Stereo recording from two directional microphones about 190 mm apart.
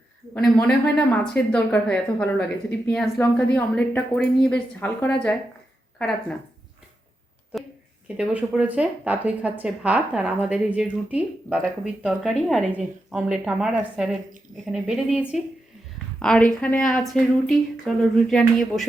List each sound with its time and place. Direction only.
0.3 s a woman's voice: 5° left (ahead or behind)
8.0 s a woman's voice: 5° right (ahead or behind)